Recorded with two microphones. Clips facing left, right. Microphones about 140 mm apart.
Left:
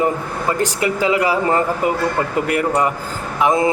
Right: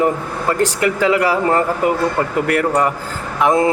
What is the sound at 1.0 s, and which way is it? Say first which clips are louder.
Speech: right 1 dB; 15° left (ahead or behind).